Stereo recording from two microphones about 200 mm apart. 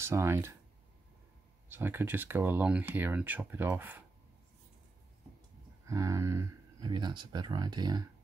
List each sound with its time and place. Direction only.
0.0 s speech: 15° right (ahead or behind)
1.7 s speech: 10° right (ahead or behind)
5.9 s speech: 15° right (ahead or behind)